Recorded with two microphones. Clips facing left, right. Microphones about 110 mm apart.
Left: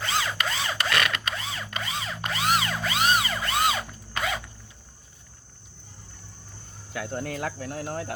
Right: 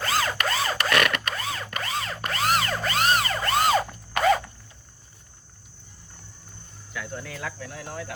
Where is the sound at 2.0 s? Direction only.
Centre (ahead or behind).